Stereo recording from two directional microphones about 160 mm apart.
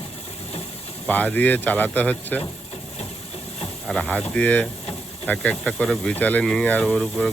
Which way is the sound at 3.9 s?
10° left (ahead or behind).